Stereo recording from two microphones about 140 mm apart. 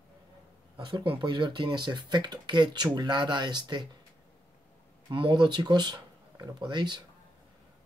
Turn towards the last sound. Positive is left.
turn(degrees=-30)  # may be behind; listen again after turning